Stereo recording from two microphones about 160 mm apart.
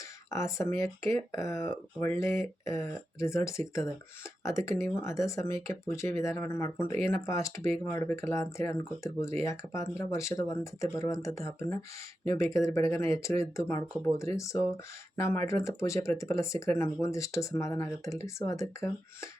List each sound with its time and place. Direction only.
0.3 s speech: 20° left (ahead or behind)